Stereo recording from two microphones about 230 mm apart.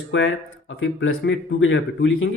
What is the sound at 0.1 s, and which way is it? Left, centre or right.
Speech, left.